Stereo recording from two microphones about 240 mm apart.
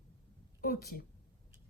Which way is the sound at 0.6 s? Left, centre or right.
Left.